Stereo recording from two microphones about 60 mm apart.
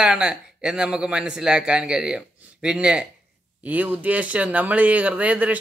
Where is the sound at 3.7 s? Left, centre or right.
Right.